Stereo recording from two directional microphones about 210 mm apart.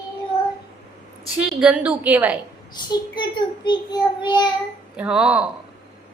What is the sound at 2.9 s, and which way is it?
A child's voice, 20° left (ahead or behind).